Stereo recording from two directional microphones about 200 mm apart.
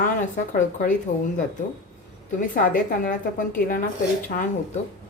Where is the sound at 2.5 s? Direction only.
45° left (ahead or behind).